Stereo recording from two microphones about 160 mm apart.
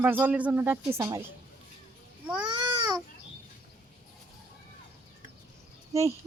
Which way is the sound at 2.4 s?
30° right (ahead or behind).